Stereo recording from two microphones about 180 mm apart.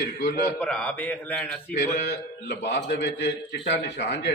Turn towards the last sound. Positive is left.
turn(degrees=70)  # may be behind; listen again after turning